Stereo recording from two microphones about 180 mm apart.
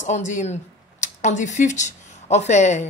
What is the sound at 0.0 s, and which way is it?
Speech, 40° left (ahead or behind).